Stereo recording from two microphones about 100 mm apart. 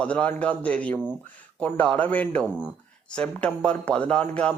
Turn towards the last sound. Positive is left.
turn(degrees=10)  # may be behind; listen again after turning